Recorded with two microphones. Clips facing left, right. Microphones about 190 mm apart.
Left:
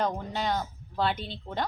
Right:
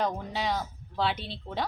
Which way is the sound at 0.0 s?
Centre (ahead or behind).